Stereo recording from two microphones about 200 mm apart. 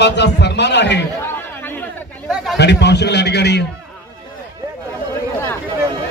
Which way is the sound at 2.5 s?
60° left (ahead or behind).